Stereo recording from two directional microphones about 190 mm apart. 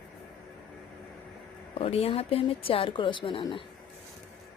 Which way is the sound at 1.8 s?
30° left (ahead or behind).